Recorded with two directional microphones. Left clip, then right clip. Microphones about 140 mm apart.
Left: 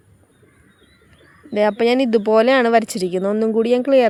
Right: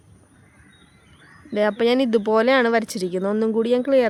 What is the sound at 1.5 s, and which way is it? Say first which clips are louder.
Speech: left 3 dB; 20° left (ahead or behind).